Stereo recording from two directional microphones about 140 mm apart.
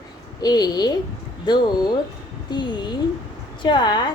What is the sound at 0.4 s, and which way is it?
A woman's voice, 30° left (ahead or behind).